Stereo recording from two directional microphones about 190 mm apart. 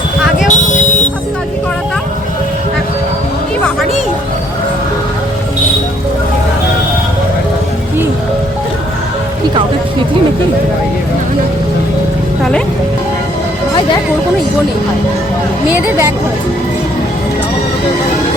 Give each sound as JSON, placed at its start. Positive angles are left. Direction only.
{"t": 0.4, "sound": "vehicle", "side_deg": 40}
{"t": 15.7, "sound": "a woman's voice", "side_deg": -10}